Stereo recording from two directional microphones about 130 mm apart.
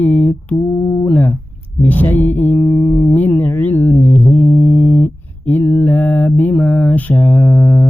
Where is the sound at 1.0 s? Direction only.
15° left (ahead or behind).